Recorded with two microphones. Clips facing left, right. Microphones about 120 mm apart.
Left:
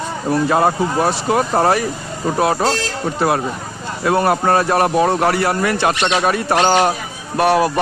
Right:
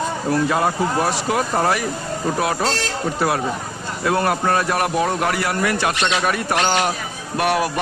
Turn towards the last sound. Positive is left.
turn(degrees=30)  # may be behind; listen again after turning